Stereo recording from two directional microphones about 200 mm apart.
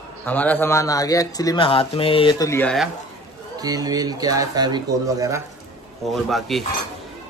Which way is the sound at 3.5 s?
20° right (ahead or behind).